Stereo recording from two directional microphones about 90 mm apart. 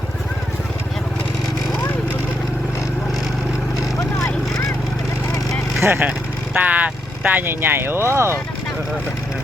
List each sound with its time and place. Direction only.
5.8 s speech: 20° right (ahead or behind)